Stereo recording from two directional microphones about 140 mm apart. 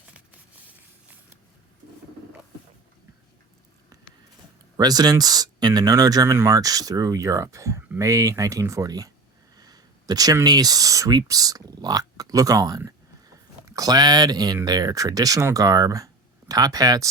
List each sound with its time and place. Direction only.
4.8 s speech: 30° right (ahead or behind)